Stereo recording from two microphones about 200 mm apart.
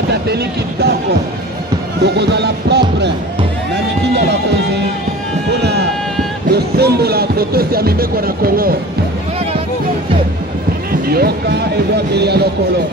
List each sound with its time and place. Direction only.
0.3 s music: 55° right (ahead or behind)
2.0 s speech: 55° right (ahead or behind)
4.1 s speech: 55° right (ahead or behind)
5.6 s a sound: 55° right (ahead or behind)
6.5 s speech: 55° right (ahead or behind)
10.9 s speech: 50° right (ahead or behind)